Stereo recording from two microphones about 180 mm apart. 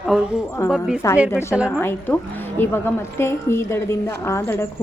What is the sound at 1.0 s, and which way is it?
Speech, 15° left (ahead or behind).